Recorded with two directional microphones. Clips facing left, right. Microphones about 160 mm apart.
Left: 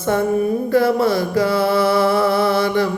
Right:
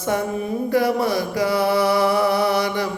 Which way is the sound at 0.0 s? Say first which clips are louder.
Left 5 dB; 15° right (ahead or behind).